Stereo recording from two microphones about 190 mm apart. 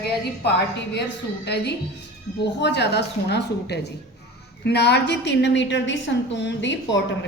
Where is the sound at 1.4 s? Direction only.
60° left (ahead or behind).